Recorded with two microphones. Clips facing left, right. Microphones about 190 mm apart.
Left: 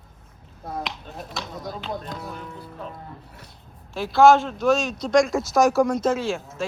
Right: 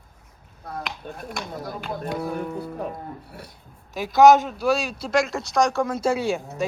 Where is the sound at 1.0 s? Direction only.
55° right (ahead or behind).